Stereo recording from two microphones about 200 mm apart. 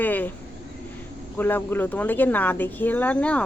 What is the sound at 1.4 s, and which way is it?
Speech, 10° left (ahead or behind).